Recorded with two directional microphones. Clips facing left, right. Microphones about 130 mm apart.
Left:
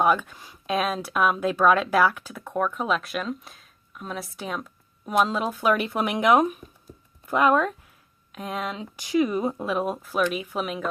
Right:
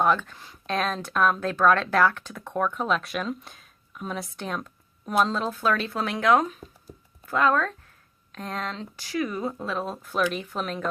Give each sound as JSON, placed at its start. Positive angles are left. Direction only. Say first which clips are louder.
{"t": 0.0, "sound": "speech", "louder": "left 1 dB", "side_deg": 10}
{"t": 10.0, "sound": "speech", "louder": "left 1 dB", "side_deg": 5}